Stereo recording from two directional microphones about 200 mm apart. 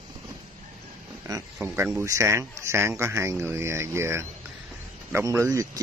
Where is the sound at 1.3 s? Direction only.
15° right (ahead or behind).